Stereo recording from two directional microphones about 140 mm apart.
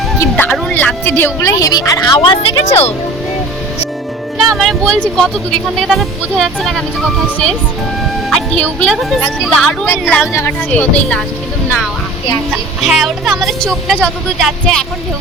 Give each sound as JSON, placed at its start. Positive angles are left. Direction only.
{"t": 0.2, "sound": "music", "side_deg": 15}
{"t": 0.7, "sound": "speech", "side_deg": 15}
{"t": 2.4, "sound": "a woman's voice", "side_deg": 45}
{"t": 4.4, "sound": "speech", "side_deg": 0}
{"t": 8.3, "sound": "speech", "side_deg": 5}
{"t": 12.8, "sound": "speech", "side_deg": 0}